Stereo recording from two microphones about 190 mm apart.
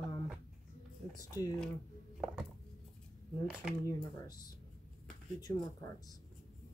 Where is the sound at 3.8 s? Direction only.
20° left (ahead or behind).